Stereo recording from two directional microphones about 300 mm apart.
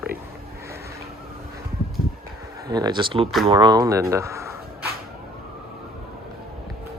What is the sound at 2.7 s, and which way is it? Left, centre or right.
Speech, centre.